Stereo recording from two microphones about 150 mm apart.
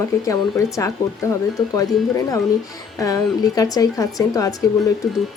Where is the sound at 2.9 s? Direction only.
20° left (ahead or behind).